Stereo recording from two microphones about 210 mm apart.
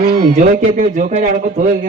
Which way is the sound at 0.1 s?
40° right (ahead or behind).